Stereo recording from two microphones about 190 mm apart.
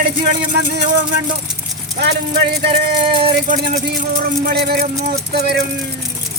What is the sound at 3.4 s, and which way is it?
Speech, 45° right (ahead or behind).